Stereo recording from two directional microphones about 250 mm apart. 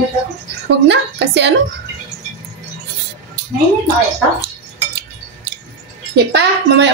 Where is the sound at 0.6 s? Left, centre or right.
Right.